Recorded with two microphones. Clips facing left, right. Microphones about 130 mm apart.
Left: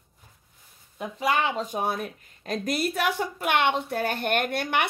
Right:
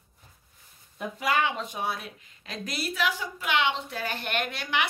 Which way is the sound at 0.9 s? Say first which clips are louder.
Left 2 dB; 30° left (ahead or behind).